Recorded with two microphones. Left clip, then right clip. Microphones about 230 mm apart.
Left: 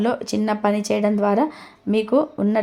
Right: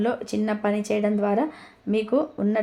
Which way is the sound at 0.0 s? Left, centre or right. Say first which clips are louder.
Left 3 dB; left.